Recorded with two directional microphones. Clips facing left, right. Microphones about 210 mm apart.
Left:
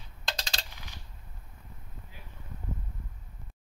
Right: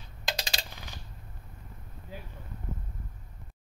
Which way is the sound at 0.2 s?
10° right (ahead or behind).